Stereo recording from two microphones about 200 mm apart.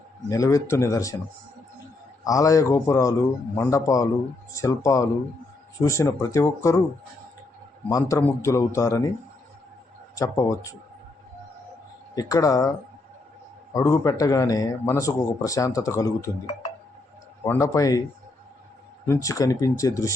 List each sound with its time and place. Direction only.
0.3 s speech: 15° left (ahead or behind)
2.2 s speech: 15° left (ahead or behind)
7.9 s speech: 15° left (ahead or behind)
10.2 s speech: 15° left (ahead or behind)
12.1 s speech: 15° left (ahead or behind)
13.7 s speech: 15° left (ahead or behind)
17.4 s speech: 15° left (ahead or behind)
19.0 s speech: 15° left (ahead or behind)